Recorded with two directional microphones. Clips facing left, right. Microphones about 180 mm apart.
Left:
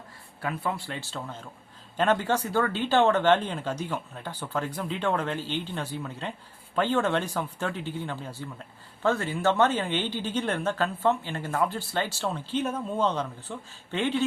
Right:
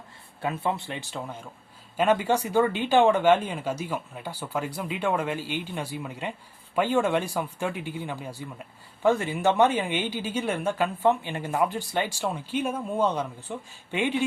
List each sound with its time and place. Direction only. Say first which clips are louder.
0.4 s a woman's voice: right 3 dB; 25° right (ahead or behind)